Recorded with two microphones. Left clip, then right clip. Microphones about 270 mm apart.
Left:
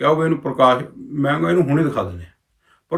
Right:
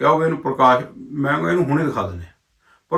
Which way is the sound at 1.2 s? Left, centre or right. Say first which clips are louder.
Left 1 dB; centre.